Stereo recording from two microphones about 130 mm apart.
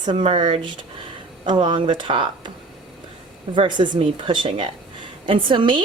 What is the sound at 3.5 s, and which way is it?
A woman's voice, 35° right (ahead or behind).